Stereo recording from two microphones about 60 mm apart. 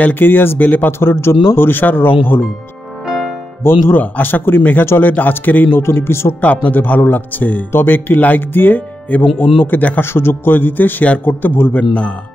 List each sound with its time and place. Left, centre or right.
0.0 s a man's voice: left
0.9 s a man's voice: left
3.1 s music: centre
3.9 s a man's voice: left
5.8 s speech: left
6.4 s a man's voice: left
10.0 s a man's voice: left
11.7 s speech: left